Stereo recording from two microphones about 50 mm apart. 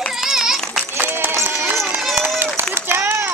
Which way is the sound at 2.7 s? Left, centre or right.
Right.